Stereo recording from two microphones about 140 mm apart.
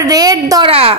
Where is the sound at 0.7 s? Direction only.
45° right (ahead or behind).